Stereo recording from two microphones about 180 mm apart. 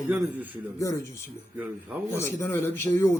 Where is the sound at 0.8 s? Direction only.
15° left (ahead or behind).